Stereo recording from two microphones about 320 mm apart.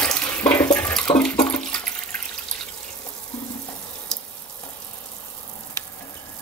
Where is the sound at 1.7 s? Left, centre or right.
Centre.